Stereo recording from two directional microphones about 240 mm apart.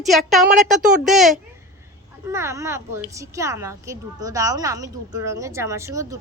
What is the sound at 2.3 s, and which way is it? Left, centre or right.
A woman's voice, centre.